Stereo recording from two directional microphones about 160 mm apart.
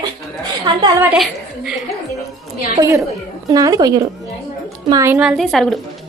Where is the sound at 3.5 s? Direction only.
20° right (ahead or behind).